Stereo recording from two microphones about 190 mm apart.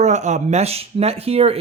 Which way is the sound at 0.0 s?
40° right (ahead or behind).